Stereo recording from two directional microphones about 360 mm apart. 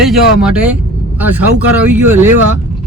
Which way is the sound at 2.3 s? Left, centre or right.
Right.